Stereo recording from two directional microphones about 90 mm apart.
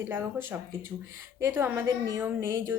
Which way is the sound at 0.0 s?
30° right (ahead or behind).